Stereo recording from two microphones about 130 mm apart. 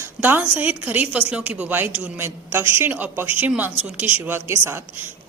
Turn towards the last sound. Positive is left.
turn(degrees=-15)  # may be behind; listen again after turning